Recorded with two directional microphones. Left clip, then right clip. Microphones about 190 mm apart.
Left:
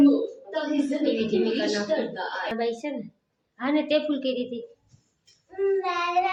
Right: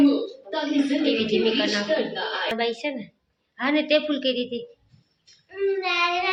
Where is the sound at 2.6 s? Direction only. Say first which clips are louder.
Right 2 dB; 5° right (ahead or behind).